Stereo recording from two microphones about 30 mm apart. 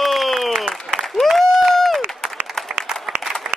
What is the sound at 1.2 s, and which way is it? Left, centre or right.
Applause, centre.